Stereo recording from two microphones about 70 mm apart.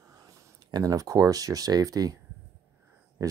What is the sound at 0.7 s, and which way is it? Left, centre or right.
Speech, right.